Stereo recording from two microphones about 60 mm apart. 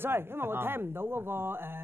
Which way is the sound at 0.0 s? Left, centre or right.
Right.